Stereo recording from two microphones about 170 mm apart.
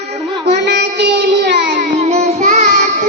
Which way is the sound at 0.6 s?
90° right.